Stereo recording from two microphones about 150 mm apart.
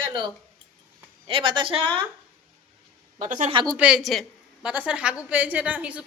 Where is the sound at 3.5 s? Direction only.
30° right (ahead or behind).